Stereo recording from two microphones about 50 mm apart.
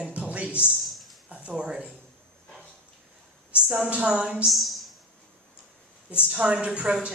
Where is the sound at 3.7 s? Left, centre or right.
Right.